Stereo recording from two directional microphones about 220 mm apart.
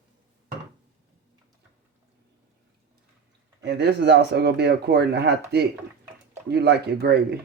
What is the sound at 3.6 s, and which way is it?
Speech, 50° right (ahead or behind).